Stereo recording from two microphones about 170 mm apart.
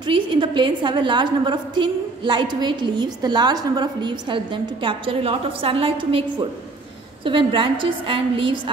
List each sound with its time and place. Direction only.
0.0 s a woman's voice: 25° right (ahead or behind)